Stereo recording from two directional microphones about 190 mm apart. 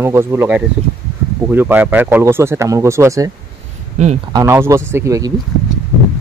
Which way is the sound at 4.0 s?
35° right (ahead or behind).